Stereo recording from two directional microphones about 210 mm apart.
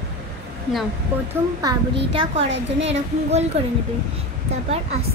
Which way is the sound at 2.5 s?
60° right (ahead or behind).